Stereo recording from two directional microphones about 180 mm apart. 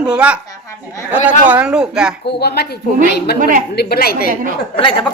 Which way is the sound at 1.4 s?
10° right (ahead or behind).